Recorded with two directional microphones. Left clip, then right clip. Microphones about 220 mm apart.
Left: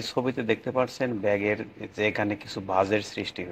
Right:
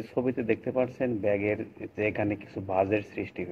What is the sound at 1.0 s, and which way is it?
Speech, 90° left.